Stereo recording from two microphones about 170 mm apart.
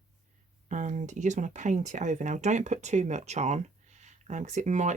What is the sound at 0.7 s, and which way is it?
Speech, 45° right (ahead or behind).